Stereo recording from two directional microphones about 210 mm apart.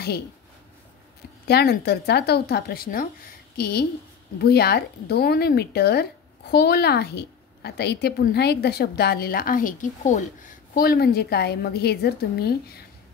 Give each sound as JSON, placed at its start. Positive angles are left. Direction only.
{"t": 1.5, "sound": "a woman's voice", "side_deg": 50}